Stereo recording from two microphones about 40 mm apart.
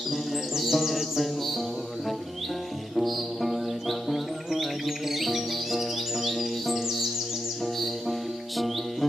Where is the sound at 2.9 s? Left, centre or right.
Centre.